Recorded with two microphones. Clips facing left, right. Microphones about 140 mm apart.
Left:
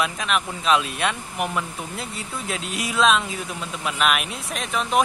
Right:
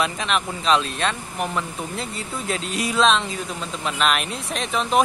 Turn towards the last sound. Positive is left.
turn(degrees=0)  # may be behind; listen again after turning